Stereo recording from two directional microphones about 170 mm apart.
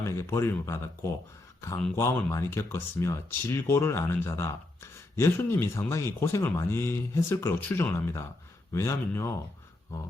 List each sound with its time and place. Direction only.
0.0 s speech: 15° left (ahead or behind)